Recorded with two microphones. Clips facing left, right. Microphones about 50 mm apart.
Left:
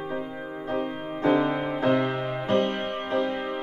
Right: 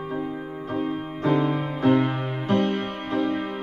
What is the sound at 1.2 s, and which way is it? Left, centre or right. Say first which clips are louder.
Music: left 1 dB; left.